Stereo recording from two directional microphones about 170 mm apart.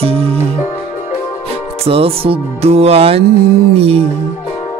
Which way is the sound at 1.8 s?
35° right (ahead or behind).